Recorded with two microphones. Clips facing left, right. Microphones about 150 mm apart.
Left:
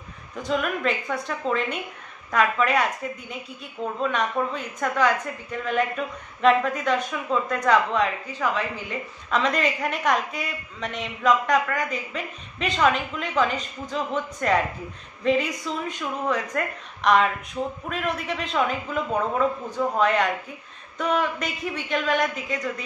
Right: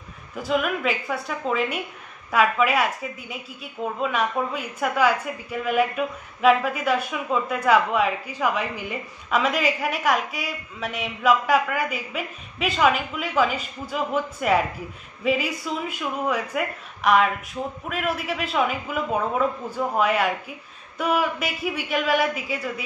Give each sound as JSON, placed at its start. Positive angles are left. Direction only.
{"t": 0.4, "sound": "a woman's voice", "side_deg": -5}